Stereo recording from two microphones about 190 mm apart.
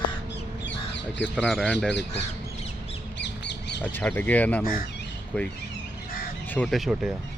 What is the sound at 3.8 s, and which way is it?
Speech, 10° left (ahead or behind).